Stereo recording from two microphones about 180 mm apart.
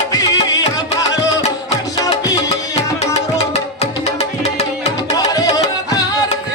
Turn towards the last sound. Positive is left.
turn(degrees=20)  # may be behind; listen again after turning